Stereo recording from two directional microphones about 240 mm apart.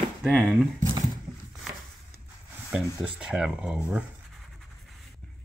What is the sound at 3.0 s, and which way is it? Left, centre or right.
Speech, centre.